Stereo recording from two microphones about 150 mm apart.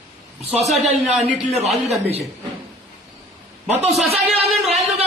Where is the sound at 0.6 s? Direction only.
Centre (ahead or behind).